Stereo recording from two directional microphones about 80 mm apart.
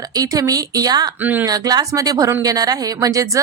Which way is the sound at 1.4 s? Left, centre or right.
Right.